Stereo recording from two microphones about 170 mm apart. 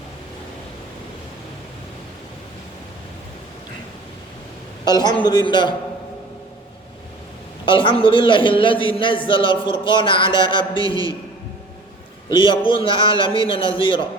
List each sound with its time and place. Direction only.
4.9 s speech: 25° left (ahead or behind)
7.6 s speech: 30° left (ahead or behind)
12.3 s speech: 30° left (ahead or behind)